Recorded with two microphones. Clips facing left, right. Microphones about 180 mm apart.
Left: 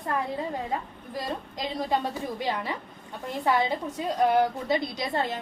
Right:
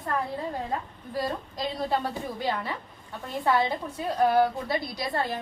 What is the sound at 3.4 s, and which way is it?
A woman's voice, 15° left (ahead or behind).